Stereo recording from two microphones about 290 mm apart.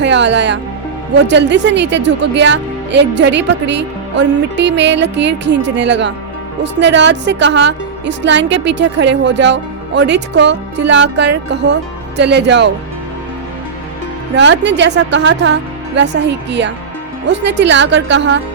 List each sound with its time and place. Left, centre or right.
0.0 s speech: right
14.3 s speech: right